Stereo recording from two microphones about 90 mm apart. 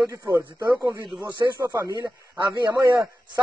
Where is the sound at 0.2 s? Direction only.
25° right (ahead or behind).